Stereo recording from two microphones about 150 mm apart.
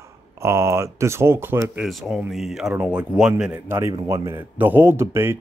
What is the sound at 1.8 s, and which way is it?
Speech, centre (ahead or behind).